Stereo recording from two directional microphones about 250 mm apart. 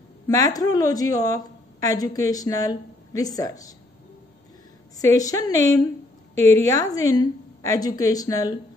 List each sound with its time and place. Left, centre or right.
0.3 s a woman's voice: centre
4.9 s a woman's voice: centre